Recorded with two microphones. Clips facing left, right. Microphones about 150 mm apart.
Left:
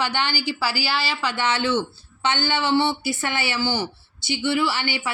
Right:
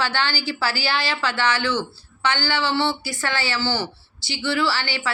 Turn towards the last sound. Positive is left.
turn(degrees=20)  # may be behind; listen again after turning